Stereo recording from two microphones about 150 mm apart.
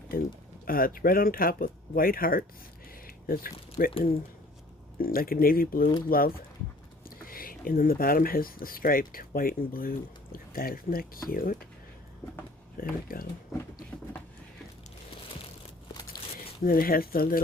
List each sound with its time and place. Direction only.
0.6 s speech: 75° left (ahead or behind)
2.9 s a sound: 75° left (ahead or behind)
4.9 s speech: 75° left (ahead or behind)
12.7 s speech: 75° left (ahead or behind)
16.6 s speech: 80° left